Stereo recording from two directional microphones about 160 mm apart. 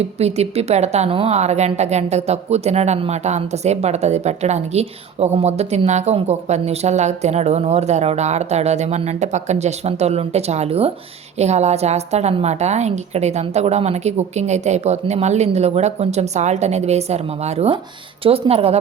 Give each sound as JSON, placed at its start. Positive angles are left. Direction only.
{"t": 0.0, "sound": "a woman's voice", "side_deg": -40}